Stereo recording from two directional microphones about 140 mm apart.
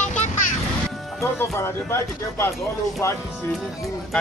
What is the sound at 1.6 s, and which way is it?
Speech, 20° left (ahead or behind).